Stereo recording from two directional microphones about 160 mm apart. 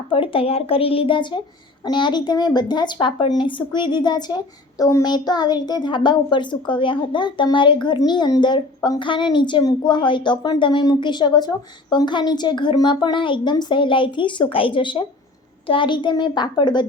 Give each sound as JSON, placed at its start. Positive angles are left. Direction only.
{"t": 0.1, "sound": "a woman's voice", "side_deg": 35}